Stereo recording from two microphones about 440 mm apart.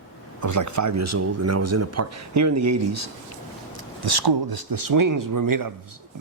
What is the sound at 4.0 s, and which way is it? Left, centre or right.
A man's voice, right.